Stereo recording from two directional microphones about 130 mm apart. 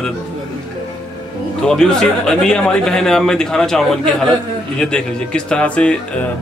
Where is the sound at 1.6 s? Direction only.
5° left (ahead or behind).